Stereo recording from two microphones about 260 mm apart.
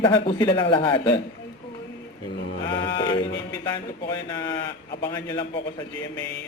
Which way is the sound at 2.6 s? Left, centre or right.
Centre.